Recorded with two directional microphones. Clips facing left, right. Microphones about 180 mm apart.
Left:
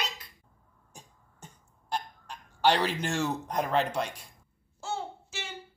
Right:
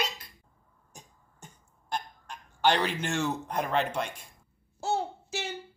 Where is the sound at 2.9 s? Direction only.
35° left (ahead or behind).